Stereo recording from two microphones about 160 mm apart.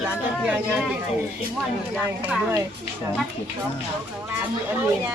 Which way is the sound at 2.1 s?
15° right (ahead or behind).